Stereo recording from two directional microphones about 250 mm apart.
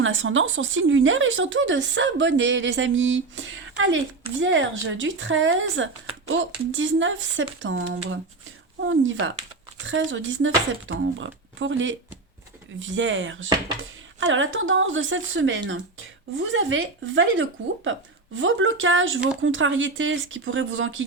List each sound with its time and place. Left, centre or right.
0.0 s speech: right